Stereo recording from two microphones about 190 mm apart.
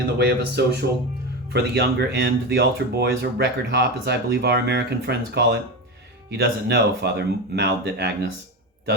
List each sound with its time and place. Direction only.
0.2 s speech: 60° right (ahead or behind)